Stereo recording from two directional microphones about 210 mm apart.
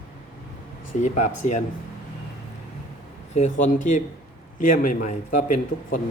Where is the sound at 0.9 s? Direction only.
35° left (ahead or behind).